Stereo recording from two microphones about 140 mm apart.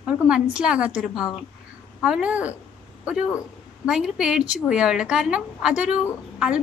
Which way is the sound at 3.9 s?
5° right (ahead or behind).